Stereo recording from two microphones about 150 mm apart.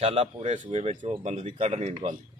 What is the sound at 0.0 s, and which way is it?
Speech, 40° right (ahead or behind).